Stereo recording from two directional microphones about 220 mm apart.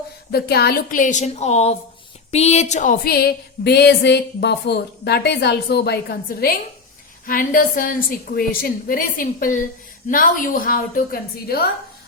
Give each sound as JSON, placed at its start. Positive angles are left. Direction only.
{"t": 0.3, "sound": "a woman's voice", "side_deg": 45}
{"t": 2.3, "sound": "a sound", "side_deg": 30}
{"t": 7.3, "sound": "a woman's voice", "side_deg": 40}